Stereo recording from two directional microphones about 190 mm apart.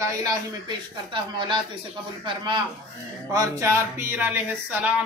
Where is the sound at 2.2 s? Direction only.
25° right (ahead or behind).